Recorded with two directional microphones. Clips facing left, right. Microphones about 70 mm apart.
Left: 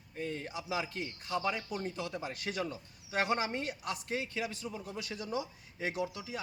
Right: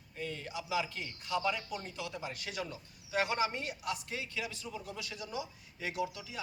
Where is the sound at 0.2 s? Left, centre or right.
Left.